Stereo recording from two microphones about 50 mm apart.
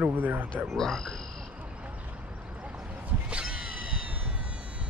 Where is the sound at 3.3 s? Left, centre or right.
Right.